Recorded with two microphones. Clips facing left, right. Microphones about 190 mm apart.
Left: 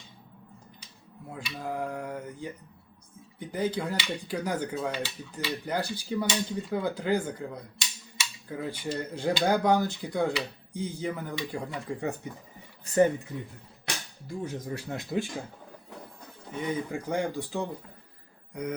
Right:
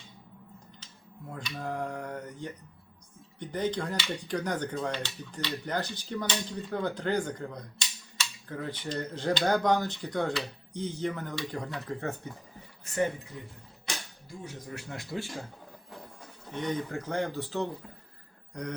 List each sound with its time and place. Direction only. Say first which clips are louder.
1.3 s speech: left 1 dB; 10° left (ahead or behind)
12.9 s speech: left 8 dB; 35° left (ahead or behind)
13.9 s cap gun: left 2 dB; 65° left (ahead or behind)
14.8 s speech: left 4 dB; 25° left (ahead or behind)
16.6 s speech: left 1 dB; 10° left (ahead or behind)